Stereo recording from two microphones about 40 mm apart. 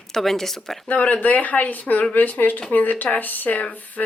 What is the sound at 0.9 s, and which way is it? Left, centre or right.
Speech, left.